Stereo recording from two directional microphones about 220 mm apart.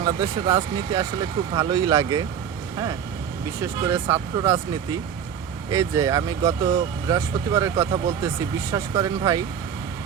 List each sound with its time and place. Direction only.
0.0 s speech: 20° right (ahead or behind)
3.6 s speech: 15° right (ahead or behind)